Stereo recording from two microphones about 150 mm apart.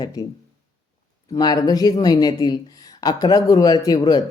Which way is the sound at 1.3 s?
25° left (ahead or behind).